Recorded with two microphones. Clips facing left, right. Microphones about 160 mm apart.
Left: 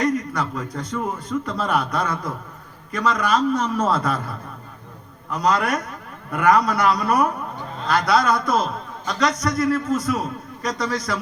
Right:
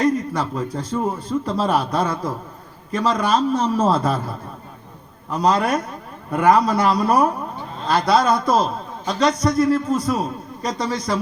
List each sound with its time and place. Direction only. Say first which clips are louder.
0.0 s a man's voice: right 2 dB; 25° right (ahead or behind)